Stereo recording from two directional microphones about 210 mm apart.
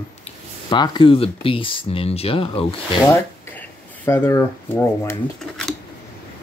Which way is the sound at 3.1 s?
10° left (ahead or behind).